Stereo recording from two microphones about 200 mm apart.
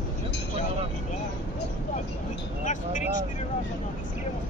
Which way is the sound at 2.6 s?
40° left (ahead or behind).